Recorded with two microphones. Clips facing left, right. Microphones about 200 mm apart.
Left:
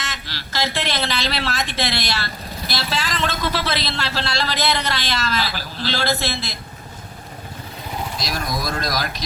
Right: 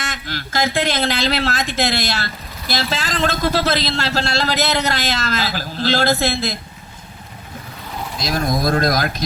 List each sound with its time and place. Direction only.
0.0 s speech: 50° right (ahead or behind)
8.3 s speech: 50° right (ahead or behind)